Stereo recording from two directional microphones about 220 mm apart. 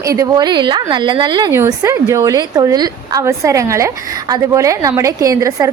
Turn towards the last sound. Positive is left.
turn(degrees=-15)  # may be behind; listen again after turning